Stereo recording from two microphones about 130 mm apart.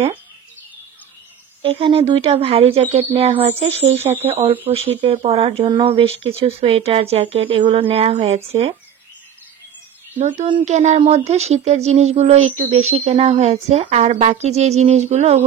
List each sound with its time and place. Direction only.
1.6 s speech: 45° right (ahead or behind)
10.1 s speech: 70° right (ahead or behind)